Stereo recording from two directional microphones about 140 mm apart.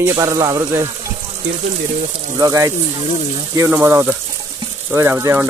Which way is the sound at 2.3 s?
25° right (ahead or behind).